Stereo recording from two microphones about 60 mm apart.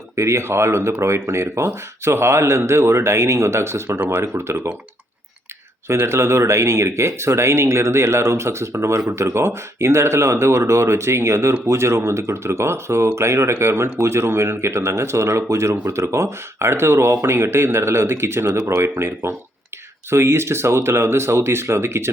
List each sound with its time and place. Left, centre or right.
0.2 s speech: right
5.9 s speech: right